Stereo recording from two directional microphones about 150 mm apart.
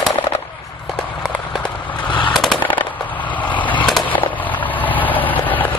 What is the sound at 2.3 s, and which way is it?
Machine gun, centre (ahead or behind).